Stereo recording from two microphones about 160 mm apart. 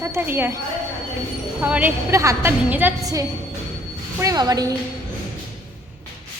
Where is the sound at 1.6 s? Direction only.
10° right (ahead or behind).